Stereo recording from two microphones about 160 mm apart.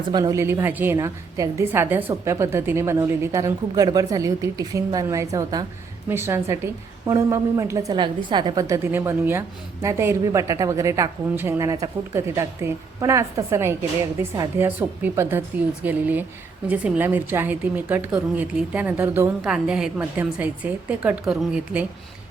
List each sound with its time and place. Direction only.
0.1 s a woman's voice: 25° right (ahead or behind); by 21.8 s 5° right (ahead or behind)